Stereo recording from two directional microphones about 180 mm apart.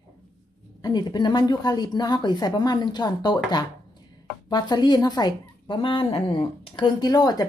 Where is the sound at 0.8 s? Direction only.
25° left (ahead or behind).